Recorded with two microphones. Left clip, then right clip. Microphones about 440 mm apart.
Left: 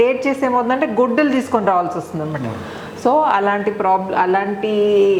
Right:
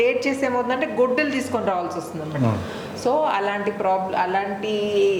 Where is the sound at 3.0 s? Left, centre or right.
Left.